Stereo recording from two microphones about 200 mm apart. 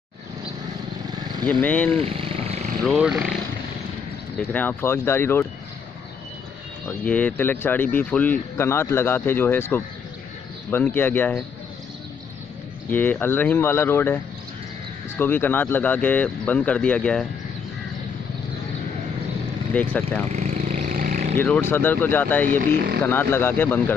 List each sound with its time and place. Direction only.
1.4 s speech: 5° left (ahead or behind)
1.9 s vehicle: 30° right (ahead or behind)
2.8 s speech: centre (ahead or behind)
4.4 s speech: 10° left (ahead or behind)
6.9 s speech: 5° left (ahead or behind)
12.9 s speech: 10° left (ahead or behind)
19.7 s speech: 5° left (ahead or behind)
20.3 s vehicle: 35° right (ahead or behind)
21.4 s speech: 10° left (ahead or behind)
22.6 s speech: 50° right (ahead or behind)
23.0 s speech: 10° left (ahead or behind)